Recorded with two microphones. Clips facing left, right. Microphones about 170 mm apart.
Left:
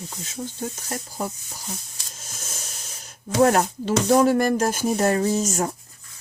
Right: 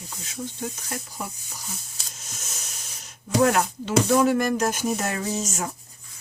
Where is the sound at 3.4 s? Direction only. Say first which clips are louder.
Left 4 dB; 40° left (ahead or behind).